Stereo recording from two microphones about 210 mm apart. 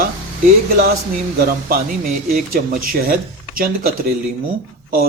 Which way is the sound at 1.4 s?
45° right (ahead or behind).